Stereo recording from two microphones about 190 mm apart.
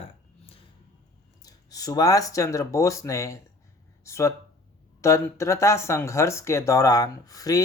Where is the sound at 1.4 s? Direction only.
20° left (ahead or behind).